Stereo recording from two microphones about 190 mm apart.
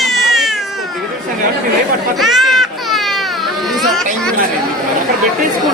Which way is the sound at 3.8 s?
Centre (ahead or behind).